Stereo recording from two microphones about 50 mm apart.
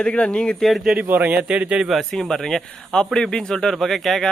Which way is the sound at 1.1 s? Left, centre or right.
Right.